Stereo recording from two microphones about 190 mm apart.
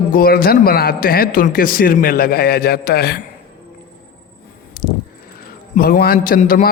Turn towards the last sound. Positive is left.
turn(degrees=45)  # may be behind; listen again after turning